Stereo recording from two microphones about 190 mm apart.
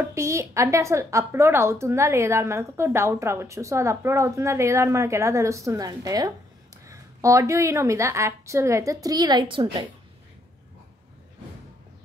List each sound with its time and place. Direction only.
0.0 s a woman's voice: 15° right (ahead or behind)